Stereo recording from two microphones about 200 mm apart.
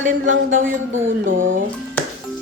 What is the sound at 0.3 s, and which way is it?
Speech, 75° right (ahead or behind).